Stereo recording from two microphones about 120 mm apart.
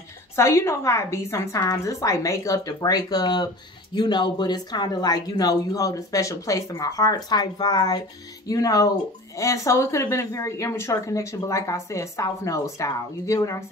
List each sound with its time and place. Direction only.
0.4 s speech: 25° left (ahead or behind)